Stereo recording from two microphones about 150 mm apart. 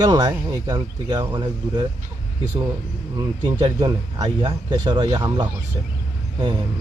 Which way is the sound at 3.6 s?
30° right (ahead or behind).